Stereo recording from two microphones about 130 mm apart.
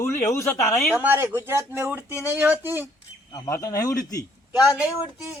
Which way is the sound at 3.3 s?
25° left (ahead or behind).